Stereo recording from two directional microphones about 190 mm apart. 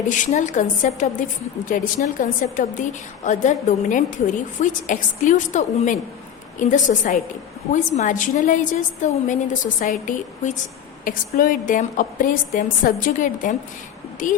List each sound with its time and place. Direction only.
0.1 s a woman's voice: 40° left (ahead or behind)